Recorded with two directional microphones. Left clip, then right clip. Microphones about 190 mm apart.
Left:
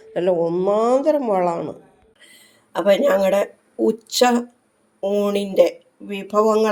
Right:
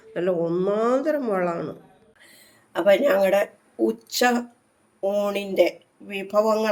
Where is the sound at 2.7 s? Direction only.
30° left (ahead or behind).